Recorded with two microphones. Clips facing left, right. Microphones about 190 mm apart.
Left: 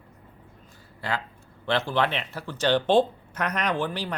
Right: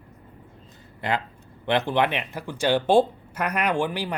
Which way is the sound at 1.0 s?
20° right (ahead or behind).